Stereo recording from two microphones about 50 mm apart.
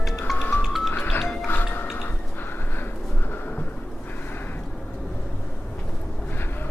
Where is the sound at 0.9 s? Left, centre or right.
Left.